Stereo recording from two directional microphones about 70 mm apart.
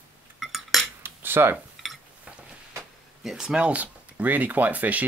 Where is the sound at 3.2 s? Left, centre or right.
Centre.